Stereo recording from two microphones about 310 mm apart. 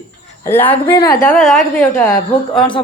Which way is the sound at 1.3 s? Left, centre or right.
Centre.